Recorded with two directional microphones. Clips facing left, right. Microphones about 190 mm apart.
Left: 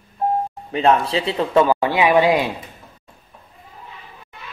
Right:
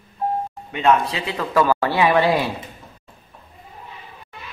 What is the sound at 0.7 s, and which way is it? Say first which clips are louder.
Speech: left 2 dB; 30° left (ahead or behind).